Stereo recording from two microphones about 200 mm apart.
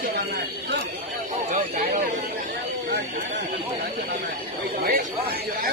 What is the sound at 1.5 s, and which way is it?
Speech, 45° right (ahead or behind).